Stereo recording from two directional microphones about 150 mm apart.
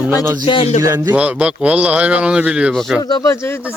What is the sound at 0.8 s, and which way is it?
Speech, 20° right (ahead or behind).